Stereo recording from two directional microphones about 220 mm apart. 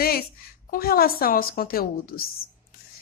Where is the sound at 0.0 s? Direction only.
45° left (ahead or behind).